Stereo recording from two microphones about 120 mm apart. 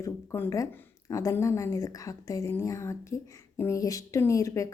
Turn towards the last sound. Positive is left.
turn(degrees=25)  # may be behind; listen again after turning